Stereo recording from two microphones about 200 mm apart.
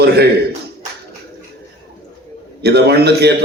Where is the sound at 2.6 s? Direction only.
55° right (ahead or behind).